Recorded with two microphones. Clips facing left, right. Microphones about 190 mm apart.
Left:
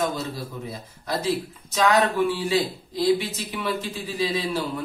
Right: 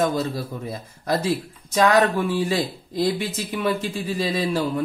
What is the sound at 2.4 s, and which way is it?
Speech, 50° right (ahead or behind).